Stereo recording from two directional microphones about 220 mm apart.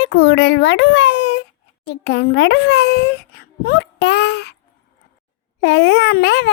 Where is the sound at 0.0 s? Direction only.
50° left (ahead or behind).